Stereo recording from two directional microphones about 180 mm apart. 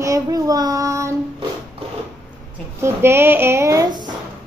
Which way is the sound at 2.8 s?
15° right (ahead or behind).